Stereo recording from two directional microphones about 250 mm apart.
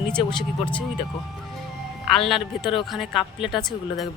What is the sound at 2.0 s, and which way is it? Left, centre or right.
Speech, centre.